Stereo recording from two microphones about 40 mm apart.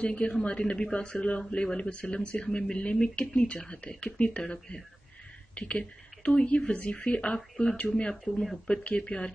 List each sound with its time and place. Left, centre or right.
0.0 s a woman's voice: left; by 8.5 s centre
8.8 s speech: left